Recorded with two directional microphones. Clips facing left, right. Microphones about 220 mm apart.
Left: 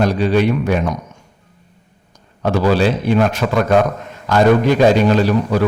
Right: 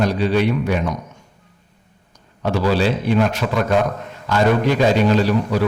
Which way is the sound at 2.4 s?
45° left (ahead or behind).